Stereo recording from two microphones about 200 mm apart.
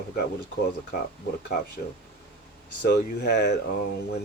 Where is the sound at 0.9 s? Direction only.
50° left (ahead or behind).